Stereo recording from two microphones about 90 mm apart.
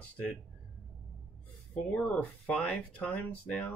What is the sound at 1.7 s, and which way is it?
Speech, 15° left (ahead or behind).